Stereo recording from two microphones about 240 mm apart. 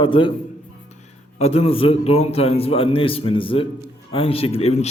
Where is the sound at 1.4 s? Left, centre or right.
Left.